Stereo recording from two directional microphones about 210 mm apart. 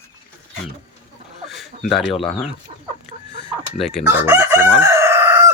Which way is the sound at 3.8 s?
Centre (ahead or behind).